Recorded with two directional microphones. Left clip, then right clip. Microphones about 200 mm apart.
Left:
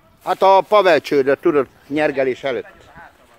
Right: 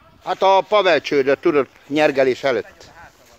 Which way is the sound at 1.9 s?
15° right (ahead or behind).